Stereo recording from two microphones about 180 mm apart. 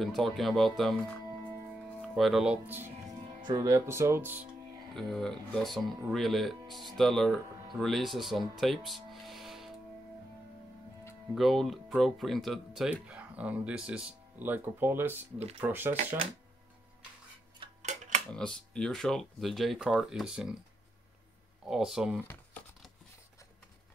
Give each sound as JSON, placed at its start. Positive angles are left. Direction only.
{"t": 0.0, "sound": "speech", "side_deg": 0}
{"t": 4.9, "sound": "speech", "side_deg": 0}
{"t": 11.3, "sound": "speech", "side_deg": 0}
{"t": 17.6, "sound": "tick-tock", "side_deg": -30}
{"t": 18.3, "sound": "speech", "side_deg": 5}
{"t": 21.6, "sound": "speech", "side_deg": 0}